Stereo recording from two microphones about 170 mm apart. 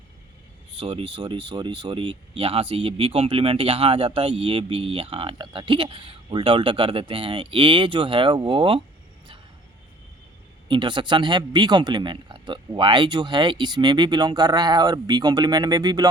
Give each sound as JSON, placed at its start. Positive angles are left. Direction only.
{"t": 0.8, "sound": "speech", "side_deg": -30}
{"t": 10.7, "sound": "speech", "side_deg": -30}